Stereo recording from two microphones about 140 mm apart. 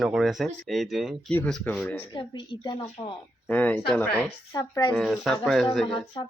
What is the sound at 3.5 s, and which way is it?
Speech, 10° left (ahead or behind).